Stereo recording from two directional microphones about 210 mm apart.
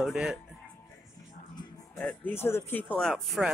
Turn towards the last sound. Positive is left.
turn(degrees=0)  # may be behind; listen again after turning